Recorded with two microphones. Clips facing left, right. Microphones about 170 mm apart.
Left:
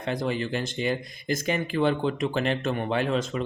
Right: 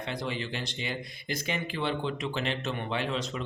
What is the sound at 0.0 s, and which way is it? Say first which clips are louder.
Speech: left 6 dB; 50° left (ahead or behind).